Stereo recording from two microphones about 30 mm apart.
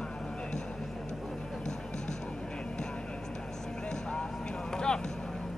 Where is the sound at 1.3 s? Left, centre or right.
Centre.